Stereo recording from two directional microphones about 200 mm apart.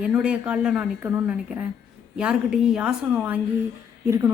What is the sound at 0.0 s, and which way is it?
A woman's voice, 5° right (ahead or behind).